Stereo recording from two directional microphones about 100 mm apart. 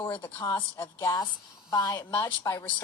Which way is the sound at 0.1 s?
50° left (ahead or behind).